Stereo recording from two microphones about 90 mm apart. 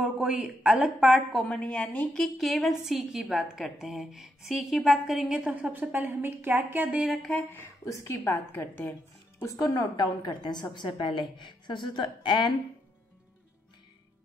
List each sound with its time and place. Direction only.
0.0 s a woman's voice: 10° right (ahead or behind)
1.5 s a woman's voice: 10° left (ahead or behind)
5.4 s speech: 15° right (ahead or behind)
7.0 s a woman's voice: centre (ahead or behind)
8.2 s a woman's voice: 20° left (ahead or behind)
9.4 s a woman's voice: 40° left (ahead or behind); by 12.5 s 60° left (ahead or behind)